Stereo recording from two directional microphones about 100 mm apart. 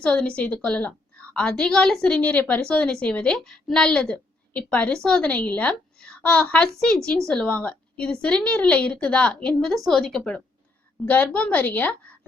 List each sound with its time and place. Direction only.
0.0 s a woman's voice: 10° left (ahead or behind)